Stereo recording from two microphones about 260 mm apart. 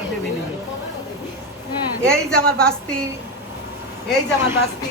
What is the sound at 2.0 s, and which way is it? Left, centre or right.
Speech, centre.